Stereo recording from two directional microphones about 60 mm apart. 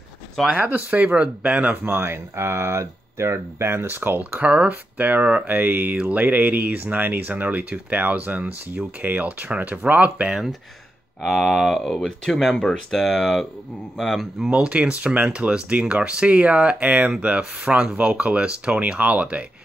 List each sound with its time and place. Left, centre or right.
0.5 s speech: right
1.9 s speech: right
11.2 s speech: centre
14.5 s speech: right